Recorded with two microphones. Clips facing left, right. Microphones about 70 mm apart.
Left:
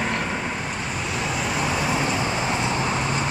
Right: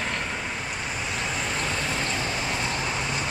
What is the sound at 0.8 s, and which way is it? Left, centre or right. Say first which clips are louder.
Vehicle: left 3 dB; centre.